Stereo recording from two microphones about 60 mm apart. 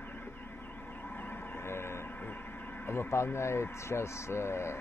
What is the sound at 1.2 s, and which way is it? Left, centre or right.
Train, left.